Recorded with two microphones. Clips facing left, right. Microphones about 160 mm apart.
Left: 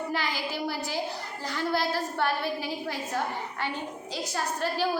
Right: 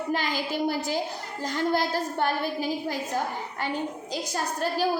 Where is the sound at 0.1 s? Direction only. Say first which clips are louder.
Right 3 dB; 45° right (ahead or behind).